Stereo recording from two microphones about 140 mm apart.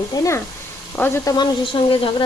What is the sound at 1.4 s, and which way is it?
Speech, 40° left (ahead or behind).